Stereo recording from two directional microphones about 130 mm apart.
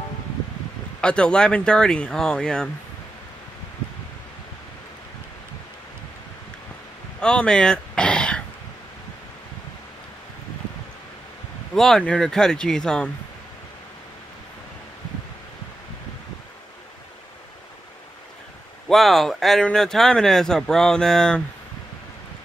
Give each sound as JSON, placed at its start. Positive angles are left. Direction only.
{"t": 1.0, "sound": "speech", "side_deg": 5}
{"t": 7.2, "sound": "speech", "side_deg": 5}
{"t": 11.7, "sound": "speech", "side_deg": 5}
{"t": 18.9, "sound": "speech", "side_deg": 0}